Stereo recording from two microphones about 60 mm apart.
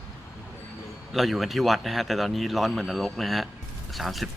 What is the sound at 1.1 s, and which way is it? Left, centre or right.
Speech, centre.